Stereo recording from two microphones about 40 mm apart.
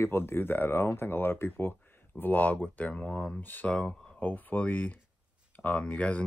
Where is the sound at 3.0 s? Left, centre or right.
Left.